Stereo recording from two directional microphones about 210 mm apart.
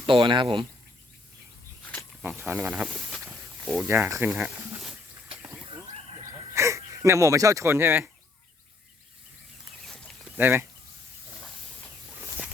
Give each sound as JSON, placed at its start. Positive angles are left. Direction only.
{"t": 0.0, "sound": "speech", "side_deg": -25}
{"t": 2.2, "sound": "speech", "side_deg": -10}
{"t": 6.5, "sound": "speech", "side_deg": -15}
{"t": 10.3, "sound": "speech", "side_deg": -10}